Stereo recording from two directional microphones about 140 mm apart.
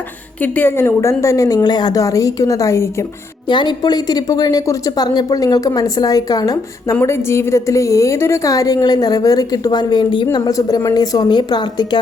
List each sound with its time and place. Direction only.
0.4 s speech: 15° left (ahead or behind)
3.5 s speech: 35° left (ahead or behind)